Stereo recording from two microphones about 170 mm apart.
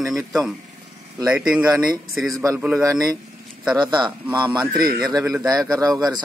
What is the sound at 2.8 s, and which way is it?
Speech, 20° right (ahead or behind).